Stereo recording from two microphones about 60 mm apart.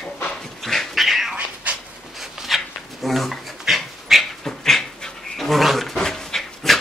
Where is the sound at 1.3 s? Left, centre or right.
Right.